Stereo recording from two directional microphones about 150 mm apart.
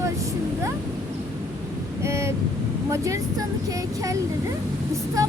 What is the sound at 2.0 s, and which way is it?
Speech, 20° right (ahead or behind).